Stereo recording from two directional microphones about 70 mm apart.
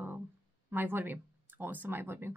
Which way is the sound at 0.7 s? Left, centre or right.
Right.